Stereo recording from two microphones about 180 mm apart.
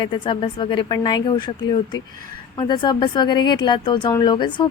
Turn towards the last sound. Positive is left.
turn(degrees=25)  # may be behind; listen again after turning